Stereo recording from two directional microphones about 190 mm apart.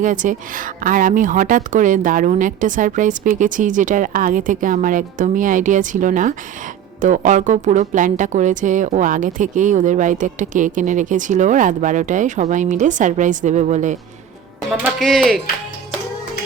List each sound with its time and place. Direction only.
0.0 s a woman's voice: 45° right (ahead or behind)
14.7 s speech: centre (ahead or behind)